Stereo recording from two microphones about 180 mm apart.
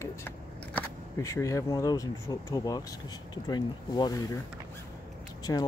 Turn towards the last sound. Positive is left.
turn(degrees=15)  # may be behind; listen again after turning